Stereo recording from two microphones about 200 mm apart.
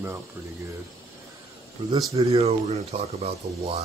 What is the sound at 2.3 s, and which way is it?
Speech, 30° right (ahead or behind).